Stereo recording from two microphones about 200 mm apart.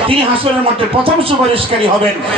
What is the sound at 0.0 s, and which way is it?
A man's voice, 25° right (ahead or behind).